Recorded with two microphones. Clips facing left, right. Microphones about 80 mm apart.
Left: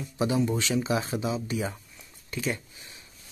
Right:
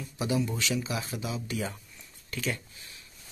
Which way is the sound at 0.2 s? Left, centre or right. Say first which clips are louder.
Left 4 dB; left.